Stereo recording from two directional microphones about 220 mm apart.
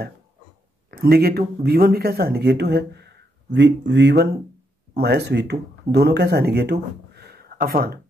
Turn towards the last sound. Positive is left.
turn(degrees=-45)  # may be behind; listen again after turning